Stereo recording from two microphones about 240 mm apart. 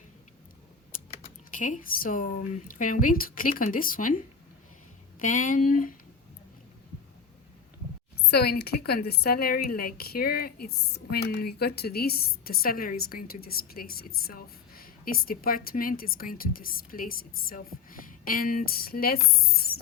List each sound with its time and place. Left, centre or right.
0.9 s speech: left
5.2 s a woman's voice: left
8.3 s a woman's voice: left